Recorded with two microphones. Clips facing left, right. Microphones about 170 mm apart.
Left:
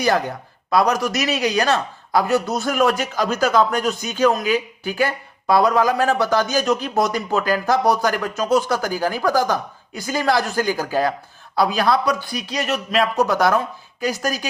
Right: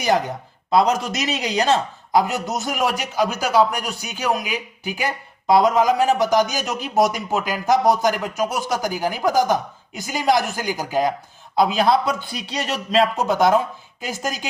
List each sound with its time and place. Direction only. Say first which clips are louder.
0.7 s a man's voice: even; 25° right (ahead or behind)